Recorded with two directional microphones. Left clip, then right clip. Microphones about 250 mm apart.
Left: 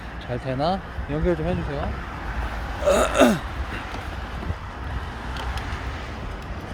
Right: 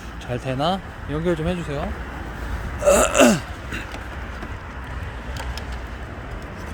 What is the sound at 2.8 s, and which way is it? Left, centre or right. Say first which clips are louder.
Burping: right 3 dB; centre.